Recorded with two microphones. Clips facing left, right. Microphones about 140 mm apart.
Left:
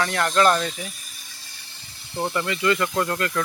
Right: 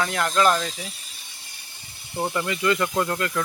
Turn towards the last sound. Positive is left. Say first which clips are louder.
# even
turn(degrees=-10)  # may be behind; listen again after turning